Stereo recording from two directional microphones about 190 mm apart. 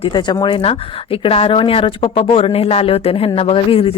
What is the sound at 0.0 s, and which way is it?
Speech, 25° left (ahead or behind).